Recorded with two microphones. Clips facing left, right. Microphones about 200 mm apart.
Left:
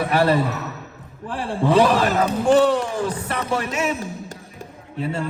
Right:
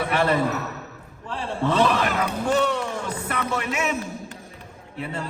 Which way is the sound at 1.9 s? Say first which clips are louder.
Left 5 dB; 30° left (ahead or behind).